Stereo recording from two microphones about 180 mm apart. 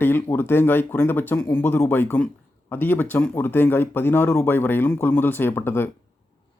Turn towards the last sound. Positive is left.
turn(degrees=10)  # may be behind; listen again after turning